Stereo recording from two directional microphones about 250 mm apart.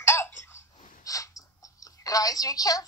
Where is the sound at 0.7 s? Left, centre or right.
Left.